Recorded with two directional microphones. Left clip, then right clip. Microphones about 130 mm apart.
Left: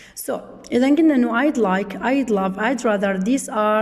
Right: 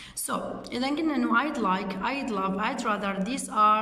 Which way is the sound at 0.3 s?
50° left (ahead or behind).